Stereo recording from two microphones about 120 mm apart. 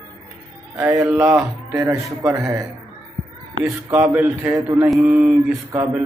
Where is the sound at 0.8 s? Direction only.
15° right (ahead or behind).